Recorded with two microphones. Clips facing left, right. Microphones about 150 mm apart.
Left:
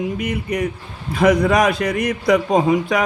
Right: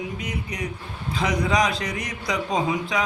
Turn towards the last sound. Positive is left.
turn(degrees=50)  # may be behind; listen again after turning